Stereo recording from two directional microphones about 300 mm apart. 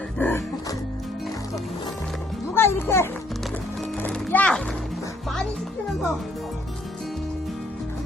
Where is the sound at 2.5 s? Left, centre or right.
Centre.